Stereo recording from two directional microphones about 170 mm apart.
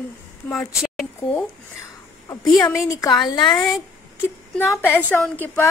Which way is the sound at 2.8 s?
20° left (ahead or behind).